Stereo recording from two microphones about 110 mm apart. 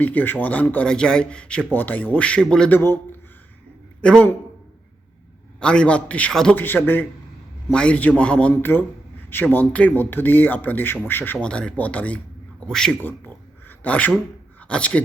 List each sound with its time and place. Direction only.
0.0 s a man's voice: 15° left (ahead or behind)
4.0 s a man's voice: 10° left (ahead or behind)
5.5 s a man's voice: 10° left (ahead or behind)